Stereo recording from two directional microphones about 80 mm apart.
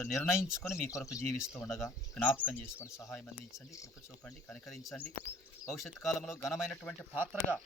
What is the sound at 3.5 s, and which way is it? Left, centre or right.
Speech, left.